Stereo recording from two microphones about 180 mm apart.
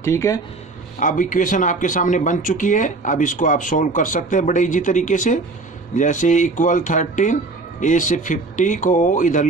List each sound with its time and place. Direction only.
0.0 s speech: 15° left (ahead or behind)
0.9 s speech: 45° left (ahead or behind)